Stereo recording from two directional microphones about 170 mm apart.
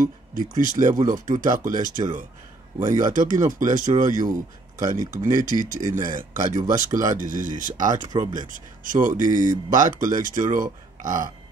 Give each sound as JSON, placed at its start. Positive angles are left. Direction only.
{"t": 0.0, "sound": "speech", "side_deg": -55}